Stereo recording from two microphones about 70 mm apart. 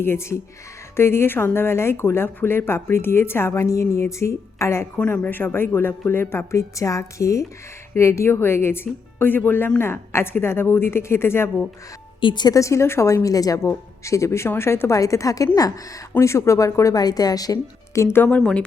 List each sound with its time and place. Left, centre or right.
0.0 s speech: left
4.9 s speech: left
12.3 s a woman's voice: left
12.5 s speech: left
13.2 s a woman's voice: left
13.7 s speech: left
14.9 s a woman's voice: left
16.2 s speech: left
17.0 s a woman's voice: left
18.1 s speech: left
18.3 s speech: centre